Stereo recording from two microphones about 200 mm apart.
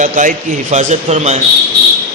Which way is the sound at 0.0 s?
40° right (ahead or behind).